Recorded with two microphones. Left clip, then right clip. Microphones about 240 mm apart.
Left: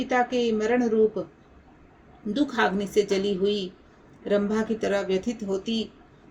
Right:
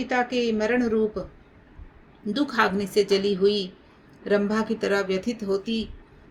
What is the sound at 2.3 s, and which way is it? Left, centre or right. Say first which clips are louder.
A woman's voice: right 1 dB; right.